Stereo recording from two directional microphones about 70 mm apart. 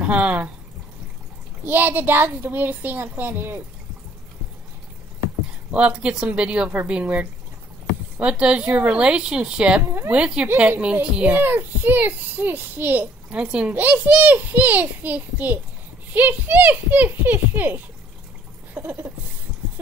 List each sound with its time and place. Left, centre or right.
0.0 s speech: centre
1.7 s a child's voice: right
5.7 s a woman's voice: centre
9.8 s a woman's voice: right
10.1 s a woman's voice: centre
11.3 s a child's voice: right